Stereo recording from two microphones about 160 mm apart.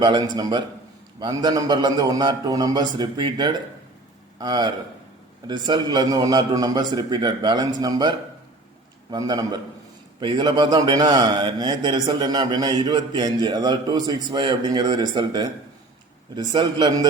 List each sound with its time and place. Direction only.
0.0 s a man's voice: 25° right (ahead or behind)